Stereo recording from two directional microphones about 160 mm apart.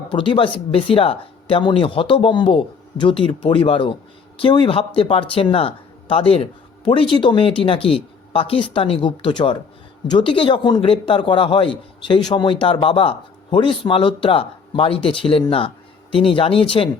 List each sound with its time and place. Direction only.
0.1 s a man's voice: 30° left (ahead or behind)